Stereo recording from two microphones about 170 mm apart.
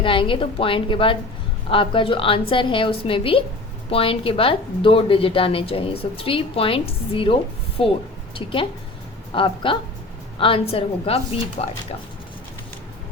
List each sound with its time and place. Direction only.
0.0 s a woman's voice: 30° left (ahead or behind)
9.3 s a woman's voice: 30° left (ahead or behind)